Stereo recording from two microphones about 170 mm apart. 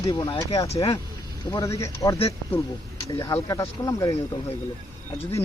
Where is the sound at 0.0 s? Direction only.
20° left (ahead or behind).